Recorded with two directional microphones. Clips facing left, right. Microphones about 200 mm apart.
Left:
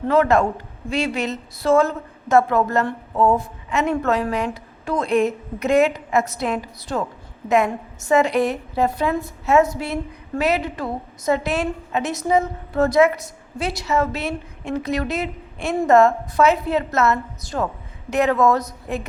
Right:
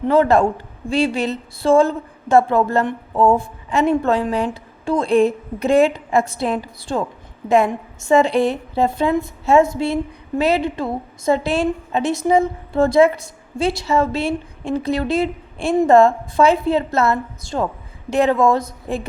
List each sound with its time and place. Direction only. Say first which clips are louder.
0.1 s a woman's voice: right 2 dB; 30° right (ahead or behind)